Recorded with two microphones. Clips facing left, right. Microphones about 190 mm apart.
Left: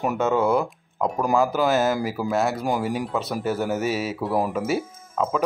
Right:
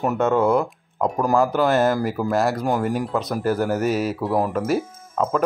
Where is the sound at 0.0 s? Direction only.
5° left (ahead or behind).